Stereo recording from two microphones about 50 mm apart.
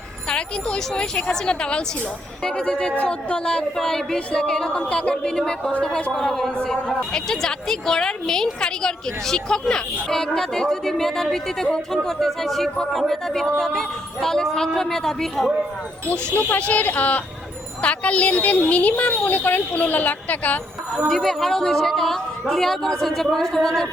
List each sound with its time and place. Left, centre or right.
0.3 s a woman's voice: centre
16.3 s a woman's voice: left
21.1 s a woman's voice: centre